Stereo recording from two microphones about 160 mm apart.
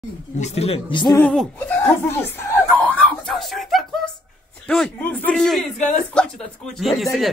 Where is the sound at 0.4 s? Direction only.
40° left (ahead or behind).